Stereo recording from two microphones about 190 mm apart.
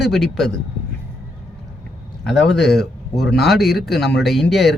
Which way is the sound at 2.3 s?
65° left (ahead or behind).